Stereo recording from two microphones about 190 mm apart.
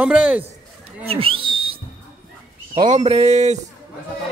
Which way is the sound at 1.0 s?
30° right (ahead or behind).